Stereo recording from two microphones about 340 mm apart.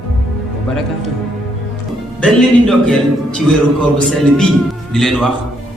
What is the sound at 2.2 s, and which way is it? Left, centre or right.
Music, centre.